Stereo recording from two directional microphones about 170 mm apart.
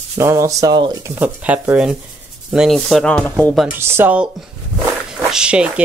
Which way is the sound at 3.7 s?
15° right (ahead or behind).